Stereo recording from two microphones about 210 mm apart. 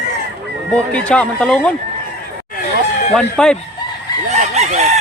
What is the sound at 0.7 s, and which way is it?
Speech, 5° left (ahead or behind).